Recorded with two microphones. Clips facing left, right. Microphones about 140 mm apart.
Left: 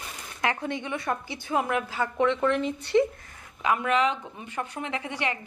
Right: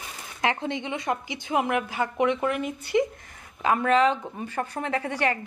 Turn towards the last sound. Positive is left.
turn(degrees=-45)  # may be behind; listen again after turning